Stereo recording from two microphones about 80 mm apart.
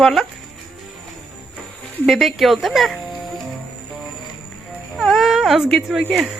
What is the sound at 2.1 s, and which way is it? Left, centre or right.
Speech, centre.